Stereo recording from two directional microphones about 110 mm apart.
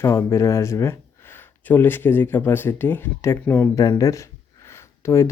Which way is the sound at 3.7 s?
30° left (ahead or behind).